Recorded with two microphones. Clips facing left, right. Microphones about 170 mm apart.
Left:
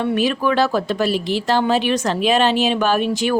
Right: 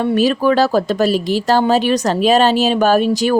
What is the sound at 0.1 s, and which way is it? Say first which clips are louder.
A woman's voice: right 4 dB; 40° right (ahead or behind).